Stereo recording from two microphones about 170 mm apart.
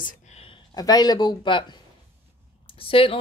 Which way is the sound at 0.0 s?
45° left (ahead or behind).